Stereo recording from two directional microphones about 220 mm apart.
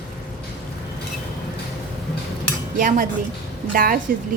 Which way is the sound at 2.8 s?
35° right (ahead or behind).